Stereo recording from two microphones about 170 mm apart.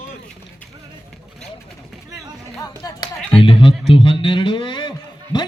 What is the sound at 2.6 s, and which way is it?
A man's voice, 20° left (ahead or behind).